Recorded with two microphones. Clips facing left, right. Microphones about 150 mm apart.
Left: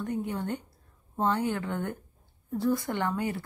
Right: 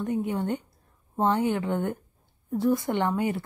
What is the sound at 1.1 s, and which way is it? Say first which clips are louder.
A woman's voice: right 4 dB; 20° right (ahead or behind).